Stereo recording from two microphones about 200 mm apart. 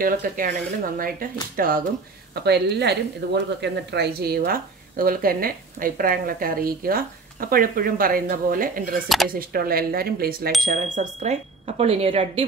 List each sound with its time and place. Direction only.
0.0 s speech: 45° right (ahead or behind)
10.6 s speech: 40° right (ahead or behind)